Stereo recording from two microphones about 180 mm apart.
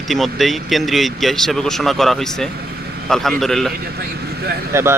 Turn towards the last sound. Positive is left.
turn(degrees=-15)  # may be behind; listen again after turning